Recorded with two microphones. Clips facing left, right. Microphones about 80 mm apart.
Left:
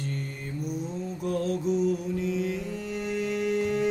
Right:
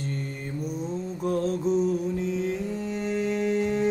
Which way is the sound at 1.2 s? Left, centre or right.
Right.